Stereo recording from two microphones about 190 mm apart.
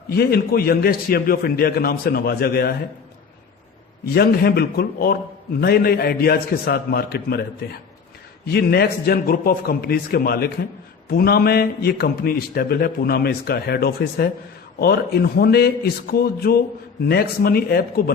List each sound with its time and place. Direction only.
0.1 s a man's voice: 55° left (ahead or behind)
4.1 s a man's voice: 55° left (ahead or behind)
8.4 s a man's voice: 55° left (ahead or behind)